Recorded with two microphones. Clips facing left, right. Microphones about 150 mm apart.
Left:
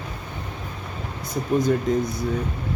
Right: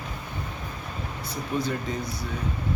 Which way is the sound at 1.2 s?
45° left (ahead or behind).